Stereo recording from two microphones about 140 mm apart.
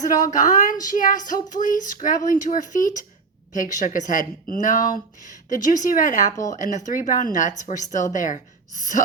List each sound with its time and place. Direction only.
0.0 s speech: 25° left (ahead or behind)
0.3 s a woman's voice: 60° left (ahead or behind)
0.9 s a woman's voice: 70° left (ahead or behind)
6.3 s speech: 25° left (ahead or behind)
6.6 s a woman's voice: 60° left (ahead or behind)